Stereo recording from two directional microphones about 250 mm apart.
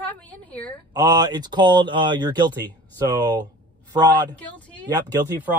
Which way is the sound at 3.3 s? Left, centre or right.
Centre.